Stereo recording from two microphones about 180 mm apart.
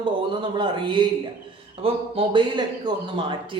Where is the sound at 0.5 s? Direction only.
25° right (ahead or behind).